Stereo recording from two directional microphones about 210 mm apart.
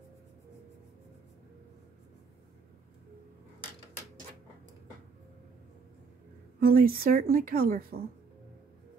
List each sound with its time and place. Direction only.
6.6 s a woman's voice: 45° right (ahead or behind)